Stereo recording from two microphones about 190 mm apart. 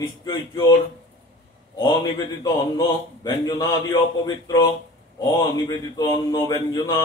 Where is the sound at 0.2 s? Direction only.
20° left (ahead or behind).